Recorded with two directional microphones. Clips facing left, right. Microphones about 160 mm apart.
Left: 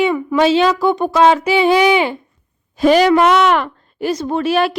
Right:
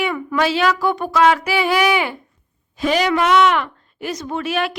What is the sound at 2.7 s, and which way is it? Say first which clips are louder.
A woman's voice: left 7 dB; 40° left (ahead or behind).